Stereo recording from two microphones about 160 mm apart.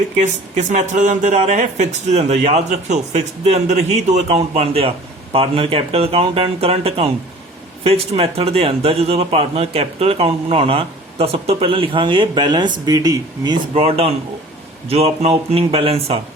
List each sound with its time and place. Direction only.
0.5 s speech: 50° right (ahead or behind)
8.1 s speech: 40° right (ahead or behind)
13.8 s speech: 40° right (ahead or behind)